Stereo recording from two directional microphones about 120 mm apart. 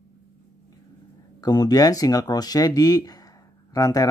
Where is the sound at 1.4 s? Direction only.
35° left (ahead or behind).